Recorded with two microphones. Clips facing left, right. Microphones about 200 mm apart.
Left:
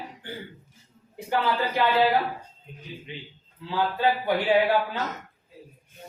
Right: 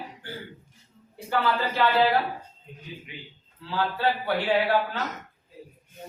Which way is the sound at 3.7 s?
15° left (ahead or behind).